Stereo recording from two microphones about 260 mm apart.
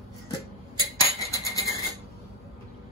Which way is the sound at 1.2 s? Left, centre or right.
Centre.